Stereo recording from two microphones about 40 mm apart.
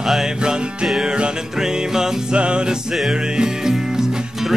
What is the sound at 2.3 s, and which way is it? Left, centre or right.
Music, right.